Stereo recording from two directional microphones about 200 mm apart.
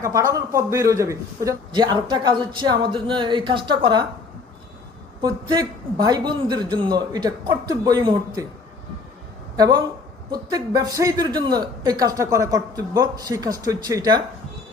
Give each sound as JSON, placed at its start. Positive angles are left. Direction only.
{"t": 0.0, "sound": "a man's voice", "side_deg": -15}
{"t": 5.2, "sound": "a man's voice", "side_deg": -20}
{"t": 9.6, "sound": "a man's voice", "side_deg": -20}